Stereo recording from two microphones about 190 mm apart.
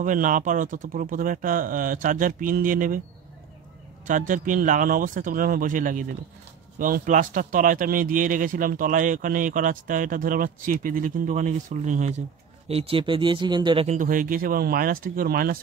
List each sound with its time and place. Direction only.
0.0 s speech: 45° right (ahead or behind)
4.1 s speech: 45° right (ahead or behind); by 13.8 s 25° right (ahead or behind)
13.8 s speech: 45° right (ahead or behind)